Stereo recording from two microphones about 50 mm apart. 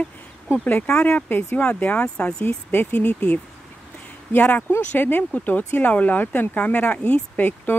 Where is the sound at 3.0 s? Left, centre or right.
Left.